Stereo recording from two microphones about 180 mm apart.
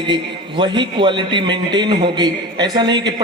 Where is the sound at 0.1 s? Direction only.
25° right (ahead or behind).